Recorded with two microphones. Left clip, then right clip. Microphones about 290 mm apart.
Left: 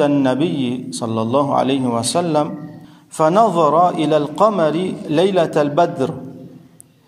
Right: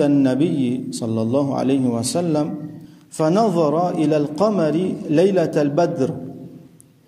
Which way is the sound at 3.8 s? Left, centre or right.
Centre.